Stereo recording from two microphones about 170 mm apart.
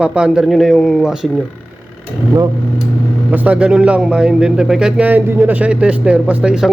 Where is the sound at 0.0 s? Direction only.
5° right (ahead or behind).